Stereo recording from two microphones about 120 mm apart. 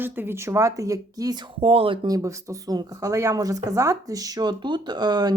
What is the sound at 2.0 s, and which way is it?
Speech, 30° right (ahead or behind).